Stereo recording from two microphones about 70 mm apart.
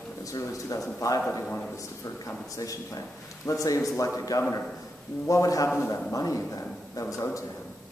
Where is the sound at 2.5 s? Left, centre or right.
Left.